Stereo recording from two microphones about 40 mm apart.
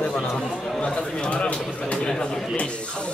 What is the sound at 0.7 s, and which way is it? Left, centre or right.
A man's voice, left.